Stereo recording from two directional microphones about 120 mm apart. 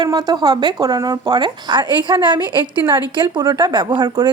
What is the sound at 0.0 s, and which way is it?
A woman's voice, 35° right (ahead or behind).